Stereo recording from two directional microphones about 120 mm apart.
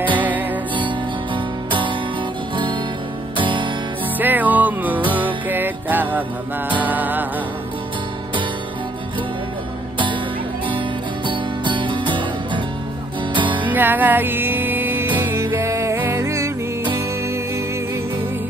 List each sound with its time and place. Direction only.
0.2 s music: 15° right (ahead or behind)
0.7 s music: 45° right (ahead or behind)
4.2 s music: 15° right (ahead or behind)
11.2 s music: 45° right (ahead or behind)
13.7 s music: 15° right (ahead or behind)